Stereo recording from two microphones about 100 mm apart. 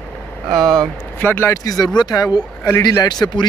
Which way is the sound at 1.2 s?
20° left (ahead or behind).